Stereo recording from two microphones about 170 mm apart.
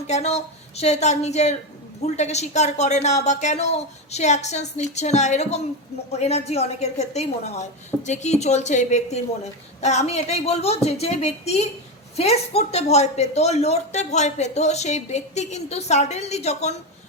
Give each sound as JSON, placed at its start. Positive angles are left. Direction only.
{"t": 0.1, "sound": "speech", "side_deg": 40}